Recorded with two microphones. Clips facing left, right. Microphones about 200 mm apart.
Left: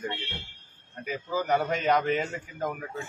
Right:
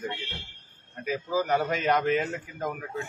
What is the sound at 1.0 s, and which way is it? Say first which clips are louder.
A man's voice: right 3 dB; centre (ahead or behind).